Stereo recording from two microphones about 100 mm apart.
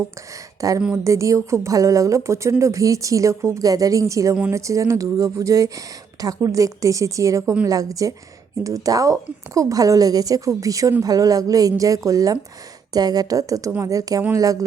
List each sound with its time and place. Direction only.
0.6 s speech: 35° right (ahead or behind)